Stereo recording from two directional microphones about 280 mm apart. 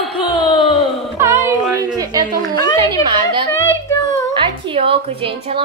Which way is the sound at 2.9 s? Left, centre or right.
Centre.